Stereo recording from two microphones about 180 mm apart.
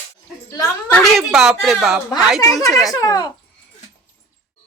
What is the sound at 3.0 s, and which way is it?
Speech, 20° left (ahead or behind).